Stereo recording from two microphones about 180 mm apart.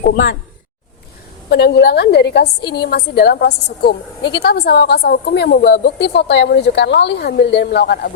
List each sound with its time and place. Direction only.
0.0 s a woman's voice: 60° left (ahead or behind)
1.5 s a woman's voice: 65° left (ahead or behind)